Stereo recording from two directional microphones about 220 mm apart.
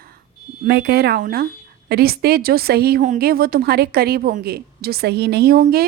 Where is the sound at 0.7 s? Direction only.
50° right (ahead or behind).